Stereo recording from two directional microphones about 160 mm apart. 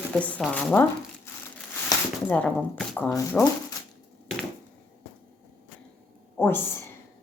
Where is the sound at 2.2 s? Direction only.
10° left (ahead or behind).